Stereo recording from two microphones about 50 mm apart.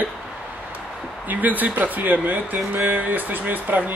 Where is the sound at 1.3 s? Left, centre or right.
Right.